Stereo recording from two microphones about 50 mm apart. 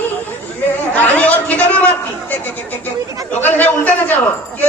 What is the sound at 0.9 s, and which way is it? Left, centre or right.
Chatter, left.